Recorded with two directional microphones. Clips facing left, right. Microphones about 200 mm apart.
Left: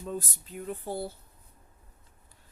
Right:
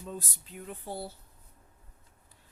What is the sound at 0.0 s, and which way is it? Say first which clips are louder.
Speech: left 5 dB; 50° left (ahead or behind).